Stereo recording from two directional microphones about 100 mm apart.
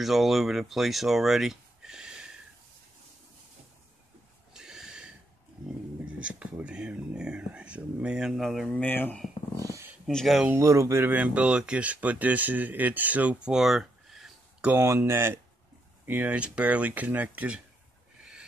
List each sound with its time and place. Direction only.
0.0 s speech: centre (ahead or behind)
4.6 s a sound: 5° right (ahead or behind)
6.0 s speech: 10° right (ahead or behind)
8.7 s speech: 20° left (ahead or behind)
9.6 s a sound: 35° right (ahead or behind)
10.0 s speech: centre (ahead or behind)
10.5 s speech: 30° right (ahead or behind)
13.6 s a sound: 5° right (ahead or behind)
14.7 s speech: 25° right (ahead or behind)
16.1 s speech: 15° right (ahead or behind)